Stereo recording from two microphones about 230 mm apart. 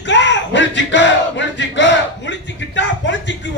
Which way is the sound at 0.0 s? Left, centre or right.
Left.